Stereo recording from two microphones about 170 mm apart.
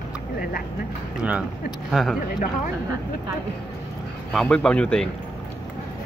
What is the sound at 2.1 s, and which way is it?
Speech, 55° left (ahead or behind).